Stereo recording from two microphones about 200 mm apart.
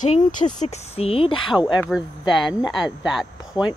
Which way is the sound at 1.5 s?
Centre (ahead or behind).